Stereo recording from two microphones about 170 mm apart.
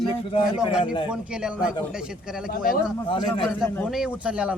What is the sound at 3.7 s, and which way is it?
Speech, centre (ahead or behind).